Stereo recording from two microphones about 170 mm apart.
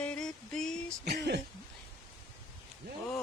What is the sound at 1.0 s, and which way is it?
Speech, 75° right (ahead or behind).